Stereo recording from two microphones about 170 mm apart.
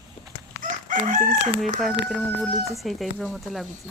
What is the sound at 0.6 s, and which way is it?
Chicken, 55° right (ahead or behind).